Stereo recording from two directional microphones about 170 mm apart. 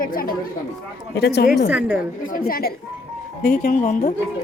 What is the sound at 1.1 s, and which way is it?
Speech, 75° left (ahead or behind).